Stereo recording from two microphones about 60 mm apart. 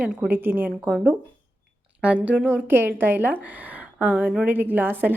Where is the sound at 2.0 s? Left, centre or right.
Right.